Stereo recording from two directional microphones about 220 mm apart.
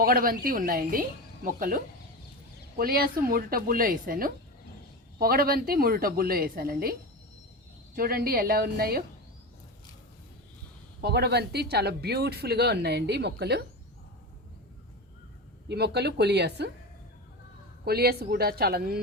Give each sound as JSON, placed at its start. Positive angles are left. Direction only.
{"t": 0.0, "sound": "speech", "side_deg": -40}
{"t": 7.9, "sound": "speech", "side_deg": -40}
{"t": 11.0, "sound": "speech", "side_deg": -50}
{"t": 15.7, "sound": "speech", "side_deg": -50}
{"t": 17.8, "sound": "speech", "side_deg": -45}